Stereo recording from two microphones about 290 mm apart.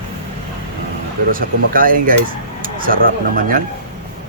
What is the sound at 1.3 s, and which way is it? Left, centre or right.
Speech, right.